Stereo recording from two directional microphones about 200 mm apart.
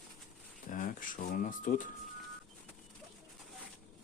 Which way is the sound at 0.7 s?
40° left (ahead or behind).